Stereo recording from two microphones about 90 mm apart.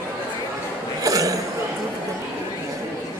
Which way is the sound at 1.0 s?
40° right (ahead or behind).